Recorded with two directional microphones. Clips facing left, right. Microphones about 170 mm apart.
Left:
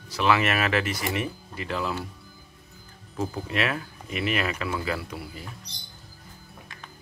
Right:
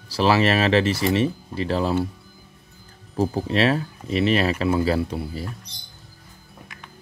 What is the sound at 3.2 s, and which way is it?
Speech, 35° right (ahead or behind).